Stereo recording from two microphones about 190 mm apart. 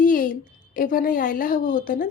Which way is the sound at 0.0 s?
45° left (ahead or behind).